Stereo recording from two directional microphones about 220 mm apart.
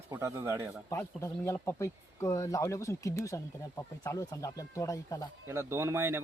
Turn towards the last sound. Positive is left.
turn(degrees=-10)  # may be behind; listen again after turning